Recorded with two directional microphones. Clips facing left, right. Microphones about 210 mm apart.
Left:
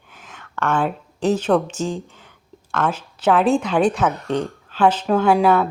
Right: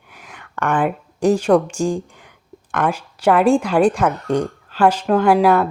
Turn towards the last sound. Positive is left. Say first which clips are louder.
# right 2 dB
turn(degrees=-5)  # may be behind; listen again after turning